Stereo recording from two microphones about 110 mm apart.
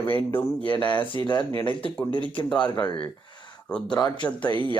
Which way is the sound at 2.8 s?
50° left (ahead or behind).